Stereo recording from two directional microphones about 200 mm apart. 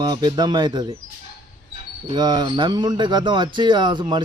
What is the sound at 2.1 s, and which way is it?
Speech, 20° right (ahead or behind).